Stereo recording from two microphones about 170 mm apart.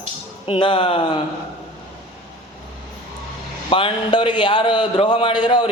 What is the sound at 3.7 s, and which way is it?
A man's voice, 30° left (ahead or behind).